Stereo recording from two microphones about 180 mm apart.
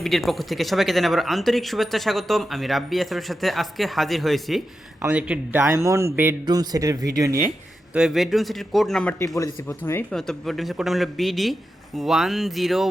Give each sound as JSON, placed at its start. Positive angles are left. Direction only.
{"t": 0.0, "sound": "a man's voice", "side_deg": 0}
{"t": 7.9, "sound": "speech", "side_deg": -5}